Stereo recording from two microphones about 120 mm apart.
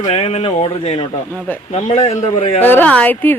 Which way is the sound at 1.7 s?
65° left (ahead or behind).